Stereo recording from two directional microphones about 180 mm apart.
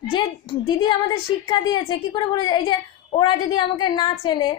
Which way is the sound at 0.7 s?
25° left (ahead or behind).